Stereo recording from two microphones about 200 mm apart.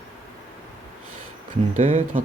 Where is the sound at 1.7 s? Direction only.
40° right (ahead or behind).